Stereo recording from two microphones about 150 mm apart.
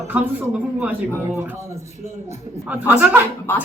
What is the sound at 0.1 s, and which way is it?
Speech, 10° right (ahead or behind).